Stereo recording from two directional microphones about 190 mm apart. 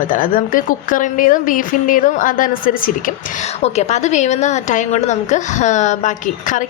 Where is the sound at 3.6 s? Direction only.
35° left (ahead or behind).